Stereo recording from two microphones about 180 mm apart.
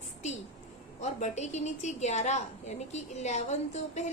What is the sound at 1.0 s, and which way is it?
A woman's voice, 40° left (ahead or behind).